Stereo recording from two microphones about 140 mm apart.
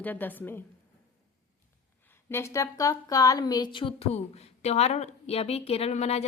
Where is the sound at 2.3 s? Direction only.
20° left (ahead or behind); by 6.2 s 50° left (ahead or behind).